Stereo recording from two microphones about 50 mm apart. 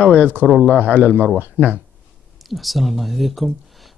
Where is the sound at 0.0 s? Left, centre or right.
Left.